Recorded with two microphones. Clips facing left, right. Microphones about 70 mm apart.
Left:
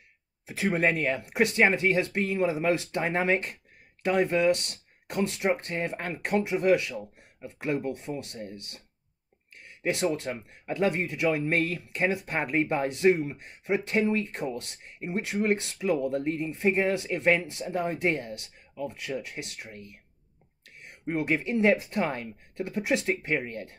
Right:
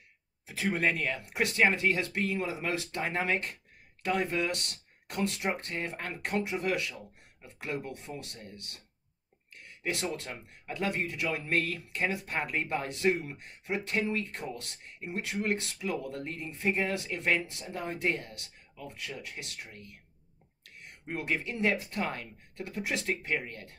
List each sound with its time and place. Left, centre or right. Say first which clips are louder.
0.5 s speech: left 4 dB; left
9.8 s speech: left 7 dB; left
21.0 s speech: left 6 dB; left